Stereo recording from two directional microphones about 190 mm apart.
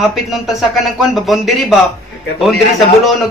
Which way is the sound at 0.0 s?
Centre (ahead or behind).